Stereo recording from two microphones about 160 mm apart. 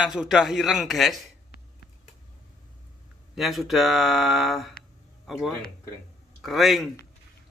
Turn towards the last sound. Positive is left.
turn(degrees=0)  # may be behind; listen again after turning